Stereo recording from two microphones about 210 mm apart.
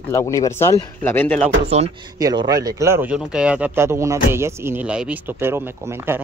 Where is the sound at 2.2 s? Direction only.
20° right (ahead or behind).